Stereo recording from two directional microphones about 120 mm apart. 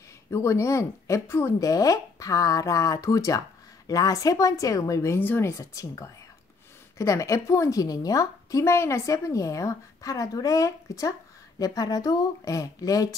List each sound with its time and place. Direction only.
0.3 s a woman's voice: 25° left (ahead or behind)